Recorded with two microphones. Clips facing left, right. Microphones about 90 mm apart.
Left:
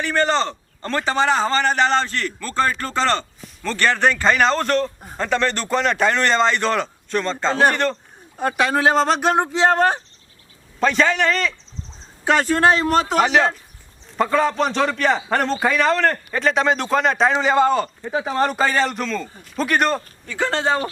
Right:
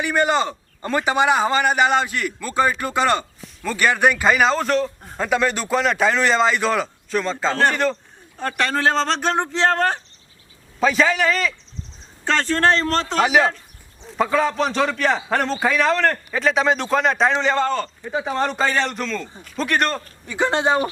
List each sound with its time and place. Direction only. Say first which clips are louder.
0.0 s a man's voice: even; 10° right (ahead or behind)
8.4 s speech: left 3 dB; 15° left (ahead or behind)
10.8 s a man's voice: even; 5° right (ahead or behind)
12.2 s speech: left 2 dB; 10° left (ahead or behind)
13.2 s a man's voice: even; 5° right (ahead or behind)
20.2 s a man's voice: right 2 dB; 20° right (ahead or behind)